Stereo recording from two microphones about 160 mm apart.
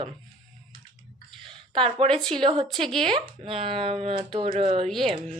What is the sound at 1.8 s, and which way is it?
Speech, 35° right (ahead or behind).